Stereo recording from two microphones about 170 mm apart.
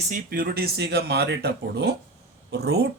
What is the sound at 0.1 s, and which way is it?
Speech, 60° right (ahead or behind).